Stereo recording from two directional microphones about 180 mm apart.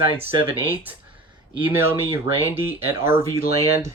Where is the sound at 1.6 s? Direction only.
10° right (ahead or behind).